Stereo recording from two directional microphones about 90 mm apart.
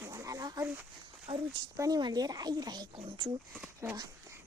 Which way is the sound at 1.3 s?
80° right.